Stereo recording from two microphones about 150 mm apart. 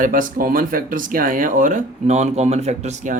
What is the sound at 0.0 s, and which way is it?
Speech, 65° right (ahead or behind).